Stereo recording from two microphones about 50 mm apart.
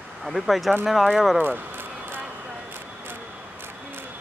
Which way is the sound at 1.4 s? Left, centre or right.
Right.